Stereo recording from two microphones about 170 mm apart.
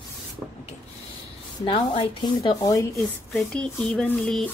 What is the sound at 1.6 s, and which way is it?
Speech, 30° left (ahead or behind).